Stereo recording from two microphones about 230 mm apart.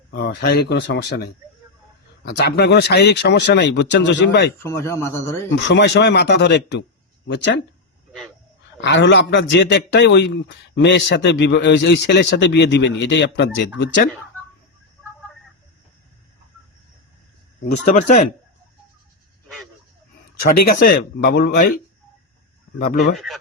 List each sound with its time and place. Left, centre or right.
0.1 s a man's voice: left
4.6 s a man's voice: centre
5.5 s a man's voice: left
8.8 s a man's voice: left
17.7 s speech: left
20.6 s a man's voice: left
23.1 s speech: centre